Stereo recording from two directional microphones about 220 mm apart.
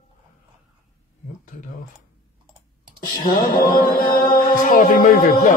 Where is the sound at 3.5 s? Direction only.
40° left (ahead or behind).